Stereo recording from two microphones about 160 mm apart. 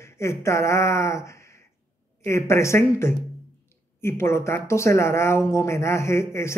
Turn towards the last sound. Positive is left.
turn(degrees=15)  # may be behind; listen again after turning